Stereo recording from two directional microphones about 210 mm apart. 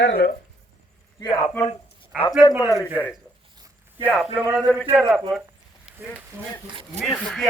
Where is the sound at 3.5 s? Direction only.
20° right (ahead or behind).